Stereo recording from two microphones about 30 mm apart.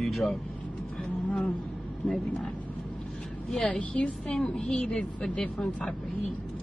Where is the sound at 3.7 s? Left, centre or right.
Left.